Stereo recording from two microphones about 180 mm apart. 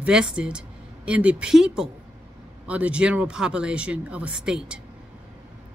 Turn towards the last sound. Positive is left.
turn(degrees=-5)  # may be behind; listen again after turning